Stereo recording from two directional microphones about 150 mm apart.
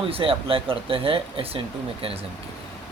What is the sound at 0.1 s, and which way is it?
Speech, 40° right (ahead or behind).